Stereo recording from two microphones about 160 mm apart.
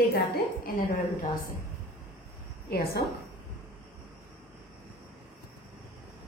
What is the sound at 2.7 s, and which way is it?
Speech, 85° left.